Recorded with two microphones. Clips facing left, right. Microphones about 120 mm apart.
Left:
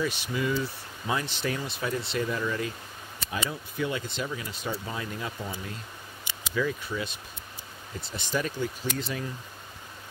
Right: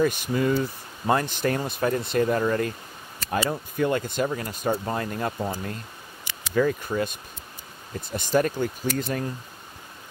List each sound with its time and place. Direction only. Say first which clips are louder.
0.0 s speech: right 6 dB; 45° right (ahead or behind)